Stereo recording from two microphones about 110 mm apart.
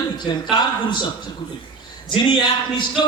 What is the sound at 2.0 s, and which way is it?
Speech, 40° left (ahead or behind).